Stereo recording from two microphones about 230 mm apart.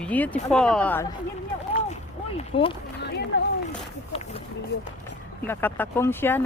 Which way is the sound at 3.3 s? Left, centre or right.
Left.